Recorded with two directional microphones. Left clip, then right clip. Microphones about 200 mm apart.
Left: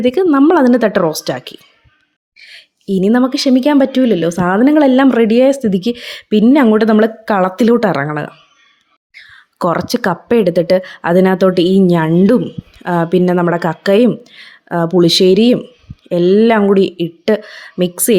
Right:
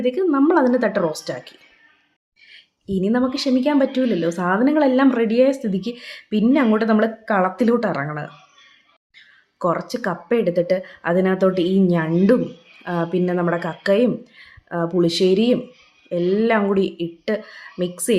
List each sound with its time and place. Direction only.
0.0 s speech: 45° left (ahead or behind)